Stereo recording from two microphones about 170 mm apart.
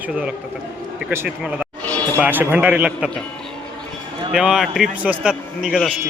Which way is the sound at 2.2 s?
10° right (ahead or behind).